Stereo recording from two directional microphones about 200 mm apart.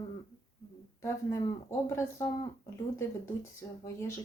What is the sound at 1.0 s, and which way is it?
Speech, 15° left (ahead or behind).